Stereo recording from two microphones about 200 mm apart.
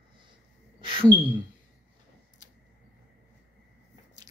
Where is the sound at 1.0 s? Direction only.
10° right (ahead or behind).